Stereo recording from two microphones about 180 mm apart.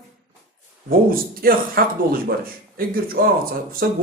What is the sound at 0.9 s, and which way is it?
Speech, 55° right (ahead or behind).